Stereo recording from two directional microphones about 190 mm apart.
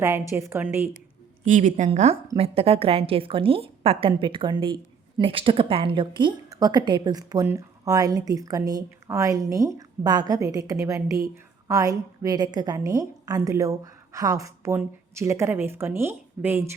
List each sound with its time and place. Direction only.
0.0 s a woman's voice: 15° right (ahead or behind)
1.5 s a woman's voice: 40° right (ahead or behind); by 16.6 s 10° right (ahead or behind)